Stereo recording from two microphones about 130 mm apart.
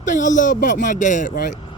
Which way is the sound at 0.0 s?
75° left (ahead or behind).